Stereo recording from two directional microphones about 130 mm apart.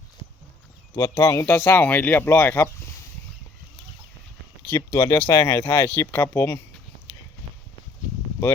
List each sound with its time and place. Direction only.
0.9 s speech: 30° left (ahead or behind)
4.7 s speech: 20° left (ahead or behind)